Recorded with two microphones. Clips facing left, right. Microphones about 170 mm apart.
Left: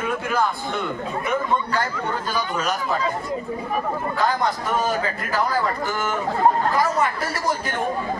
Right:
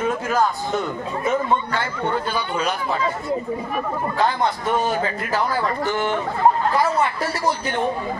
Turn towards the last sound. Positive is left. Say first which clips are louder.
# right 2 dB
turn(degrees=45)  # may be behind; listen again after turning